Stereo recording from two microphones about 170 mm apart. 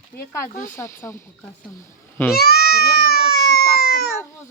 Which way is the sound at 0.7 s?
15° left (ahead or behind).